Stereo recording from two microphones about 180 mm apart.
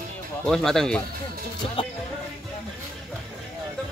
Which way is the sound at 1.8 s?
30° left (ahead or behind).